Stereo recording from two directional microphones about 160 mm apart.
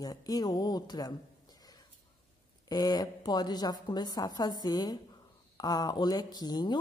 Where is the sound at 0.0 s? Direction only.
25° left (ahead or behind).